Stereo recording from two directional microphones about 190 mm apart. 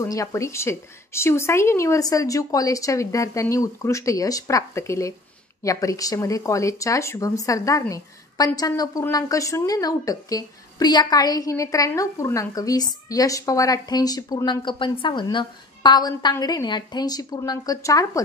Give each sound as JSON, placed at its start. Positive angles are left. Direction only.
{"t": 0.0, "sound": "speech", "side_deg": 15}